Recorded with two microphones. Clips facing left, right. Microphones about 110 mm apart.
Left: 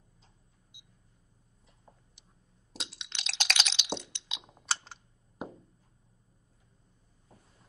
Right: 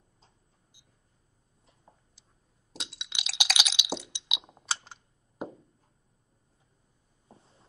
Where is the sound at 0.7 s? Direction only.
20° left (ahead or behind).